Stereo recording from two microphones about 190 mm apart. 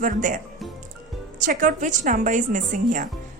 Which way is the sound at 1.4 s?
45° right (ahead or behind).